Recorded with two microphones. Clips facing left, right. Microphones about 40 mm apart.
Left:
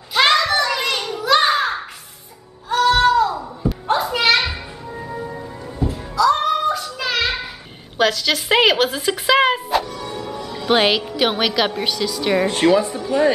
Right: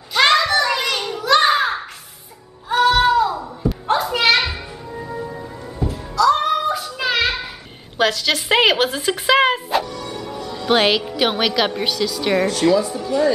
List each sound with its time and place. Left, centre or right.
0.1 s a sound: centre
2.7 s children playing: centre
8.0 s speech: centre
12.4 s a woman's voice: left
12.9 s a woman's voice: left